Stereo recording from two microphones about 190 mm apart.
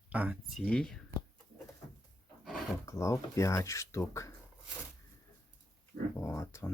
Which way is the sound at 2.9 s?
15° left (ahead or behind).